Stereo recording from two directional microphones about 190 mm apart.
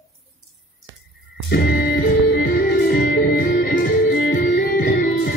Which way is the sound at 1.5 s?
60° left (ahead or behind).